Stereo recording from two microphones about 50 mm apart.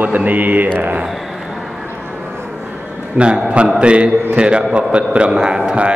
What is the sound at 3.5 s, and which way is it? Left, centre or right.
A man's voice, right.